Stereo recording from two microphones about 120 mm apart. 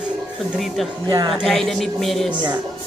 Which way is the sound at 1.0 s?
35° right (ahead or behind).